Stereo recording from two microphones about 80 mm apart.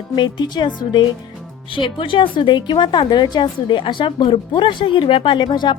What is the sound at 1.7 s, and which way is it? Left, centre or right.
A woman's voice, left.